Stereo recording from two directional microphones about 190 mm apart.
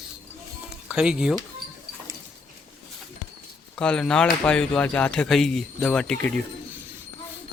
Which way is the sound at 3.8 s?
5° left (ahead or behind).